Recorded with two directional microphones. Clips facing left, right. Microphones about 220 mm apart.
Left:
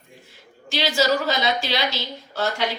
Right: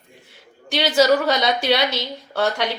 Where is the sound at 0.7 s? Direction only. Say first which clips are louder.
Right 5 dB; 60° right (ahead or behind).